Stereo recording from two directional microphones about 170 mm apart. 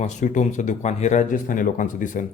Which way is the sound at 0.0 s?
45° left (ahead or behind).